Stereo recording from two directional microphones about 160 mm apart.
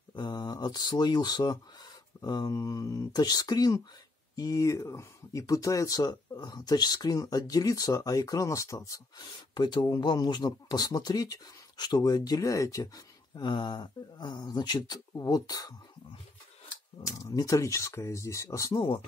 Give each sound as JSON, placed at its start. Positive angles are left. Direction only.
{"t": 0.1, "sound": "speech", "side_deg": 25}
{"t": 17.0, "sound": "speech", "side_deg": 20}